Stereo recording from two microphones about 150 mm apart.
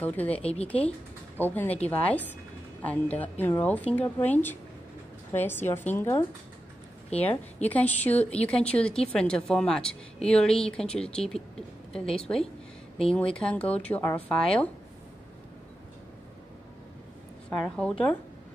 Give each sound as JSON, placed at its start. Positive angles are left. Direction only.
{"t": 0.0, "sound": "a woman's voice", "side_deg": 10}
{"t": 0.4, "sound": "speech", "side_deg": 40}
{"t": 0.7, "sound": "a woman's voice", "side_deg": 10}
{"t": 7.6, "sound": "a woman's voice", "side_deg": 10}
{"t": 17.5, "sound": "a woman's voice", "side_deg": 5}